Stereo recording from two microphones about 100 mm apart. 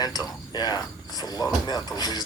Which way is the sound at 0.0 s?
40° left (ahead or behind).